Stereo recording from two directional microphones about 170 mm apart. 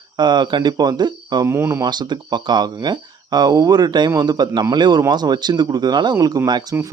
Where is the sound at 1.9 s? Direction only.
25° right (ahead or behind).